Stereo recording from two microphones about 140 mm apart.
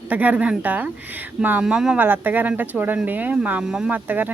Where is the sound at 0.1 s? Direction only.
10° right (ahead or behind).